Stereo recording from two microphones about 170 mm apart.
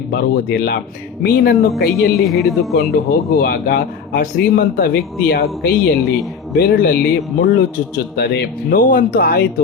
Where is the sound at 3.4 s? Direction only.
65° left (ahead or behind).